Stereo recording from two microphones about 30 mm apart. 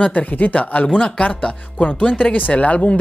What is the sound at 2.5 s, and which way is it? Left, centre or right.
Speech, left.